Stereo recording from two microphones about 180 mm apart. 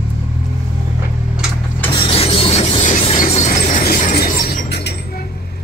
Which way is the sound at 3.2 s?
45° left (ahead or behind).